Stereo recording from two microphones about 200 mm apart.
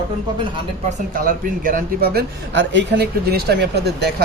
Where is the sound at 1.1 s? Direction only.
45° right (ahead or behind).